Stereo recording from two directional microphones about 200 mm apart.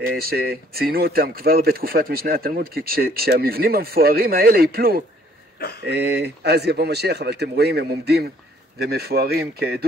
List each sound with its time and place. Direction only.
0.0 s speech: 50° right (ahead or behind)